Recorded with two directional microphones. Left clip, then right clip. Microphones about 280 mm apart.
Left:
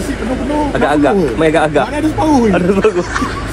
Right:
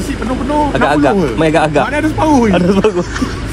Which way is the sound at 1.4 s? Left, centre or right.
Right.